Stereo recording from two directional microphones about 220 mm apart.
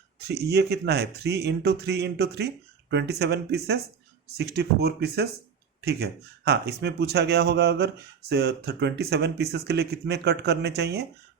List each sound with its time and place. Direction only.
0.2 s speech: 45° right (ahead or behind)